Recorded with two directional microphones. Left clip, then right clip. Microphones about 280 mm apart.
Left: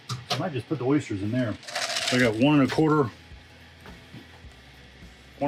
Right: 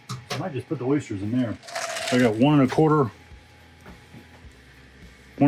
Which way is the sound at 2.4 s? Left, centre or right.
Right.